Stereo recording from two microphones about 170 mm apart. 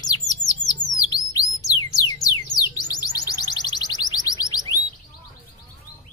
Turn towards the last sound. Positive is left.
turn(degrees=20)  # may be behind; listen again after turning